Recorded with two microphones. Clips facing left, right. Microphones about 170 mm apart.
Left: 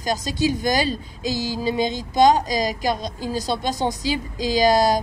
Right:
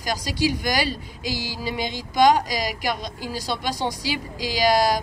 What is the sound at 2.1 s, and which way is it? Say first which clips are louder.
A woman's voice: left 2 dB; 20° left (ahead or behind).